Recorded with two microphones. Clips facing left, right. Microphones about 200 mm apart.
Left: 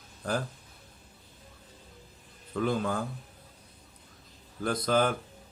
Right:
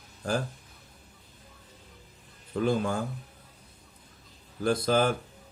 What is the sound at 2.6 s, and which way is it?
Speech, 25° right (ahead or behind).